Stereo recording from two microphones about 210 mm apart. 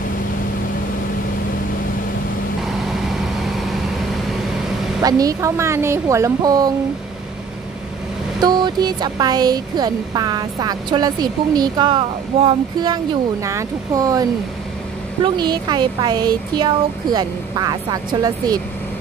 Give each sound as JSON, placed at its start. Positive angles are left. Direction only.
{"t": 5.0, "sound": "speech", "side_deg": -15}
{"t": 8.4, "sound": "speech", "side_deg": -20}
{"t": 15.2, "sound": "speech", "side_deg": -20}